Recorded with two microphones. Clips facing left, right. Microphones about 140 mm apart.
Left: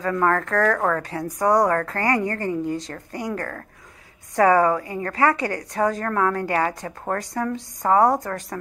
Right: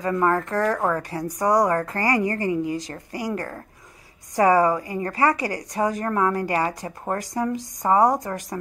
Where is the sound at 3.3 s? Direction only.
20° right (ahead or behind).